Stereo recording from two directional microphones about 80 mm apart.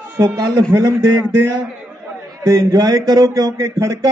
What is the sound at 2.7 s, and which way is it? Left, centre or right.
Speech, right.